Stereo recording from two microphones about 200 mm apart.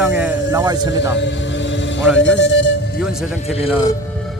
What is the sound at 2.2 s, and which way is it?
Speech, 65° left (ahead or behind).